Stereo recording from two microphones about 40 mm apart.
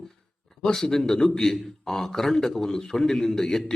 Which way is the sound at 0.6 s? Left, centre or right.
Centre.